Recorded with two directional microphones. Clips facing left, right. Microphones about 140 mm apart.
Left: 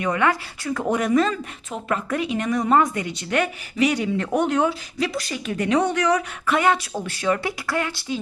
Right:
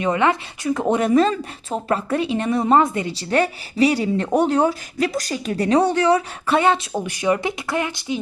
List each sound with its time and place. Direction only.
0.0 s speech: 25° right (ahead or behind)
6.9 s speech: 15° right (ahead or behind)